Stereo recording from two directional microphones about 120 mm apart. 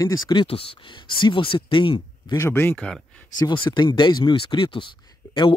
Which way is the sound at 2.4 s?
20° left (ahead or behind).